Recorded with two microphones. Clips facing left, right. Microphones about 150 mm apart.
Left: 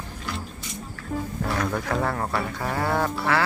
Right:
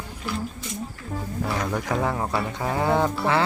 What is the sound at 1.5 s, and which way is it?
Speech, 10° right (ahead or behind).